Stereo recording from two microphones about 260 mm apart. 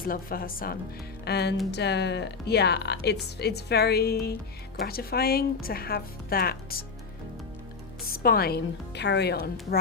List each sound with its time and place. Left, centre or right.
0.0 s a woman's voice: left
8.0 s a woman's voice: left